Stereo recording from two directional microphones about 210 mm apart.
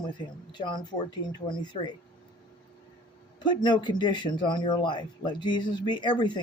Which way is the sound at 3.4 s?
20° left (ahead or behind).